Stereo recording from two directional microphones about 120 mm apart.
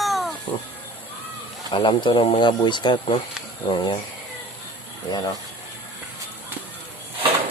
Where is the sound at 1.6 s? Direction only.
40° left (ahead or behind).